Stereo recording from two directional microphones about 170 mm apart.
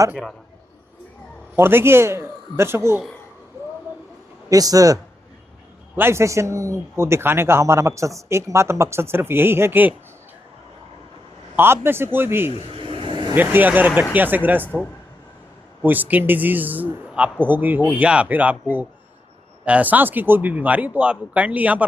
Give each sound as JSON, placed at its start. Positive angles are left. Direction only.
{"t": 0.1, "sound": "a man's voice", "side_deg": 0}
{"t": 1.5, "sound": "a man's voice", "side_deg": -15}
{"t": 4.4, "sound": "a man's voice", "side_deg": -20}
{"t": 6.0, "sound": "a man's voice", "side_deg": -15}
{"t": 11.5, "sound": "a man's voice", "side_deg": -15}
{"t": 12.7, "sound": "vehicle", "side_deg": -30}
{"t": 13.3, "sound": "a man's voice", "side_deg": -10}